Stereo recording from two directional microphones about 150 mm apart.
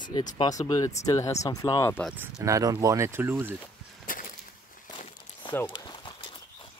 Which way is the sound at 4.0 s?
65° left (ahead or behind).